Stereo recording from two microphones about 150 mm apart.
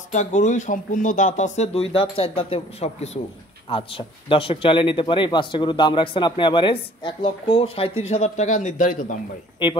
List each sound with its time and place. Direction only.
0.1 s a man's voice: 55° left (ahead or behind)